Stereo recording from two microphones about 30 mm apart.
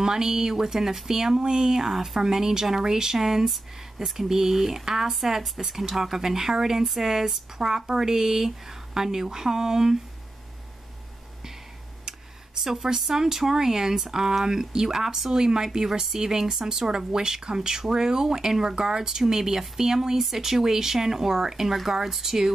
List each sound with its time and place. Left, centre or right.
0.0 s speech: centre
12.5 s speech: centre